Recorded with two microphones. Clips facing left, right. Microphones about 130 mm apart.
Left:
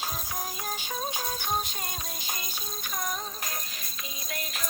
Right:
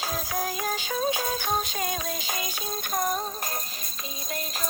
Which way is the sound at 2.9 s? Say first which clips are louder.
Right 7 dB; 40° right (ahead or behind).